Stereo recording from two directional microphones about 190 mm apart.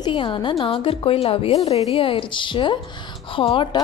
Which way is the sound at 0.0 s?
25° left (ahead or behind).